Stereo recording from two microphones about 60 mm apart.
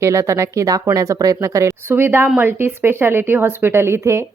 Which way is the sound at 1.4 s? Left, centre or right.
Right.